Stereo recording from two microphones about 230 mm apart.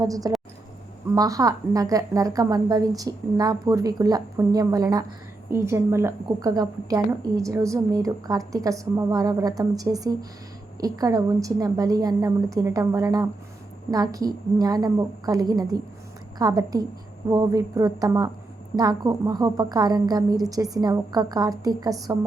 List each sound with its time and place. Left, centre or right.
0.0 s a woman's voice: centre